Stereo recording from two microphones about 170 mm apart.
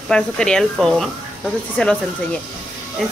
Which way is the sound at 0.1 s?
5° left (ahead or behind).